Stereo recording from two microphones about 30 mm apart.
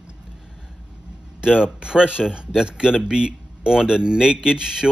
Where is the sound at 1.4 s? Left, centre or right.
Right.